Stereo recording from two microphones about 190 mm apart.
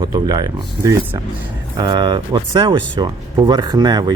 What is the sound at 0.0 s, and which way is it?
Speech, 20° right (ahead or behind).